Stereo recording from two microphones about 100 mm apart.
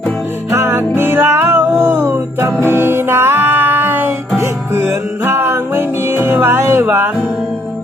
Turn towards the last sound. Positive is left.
turn(degrees=-20)  # may be behind; listen again after turning